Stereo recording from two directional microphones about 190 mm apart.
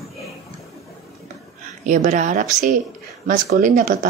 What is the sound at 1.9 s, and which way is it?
Speech, 40° right (ahead or behind).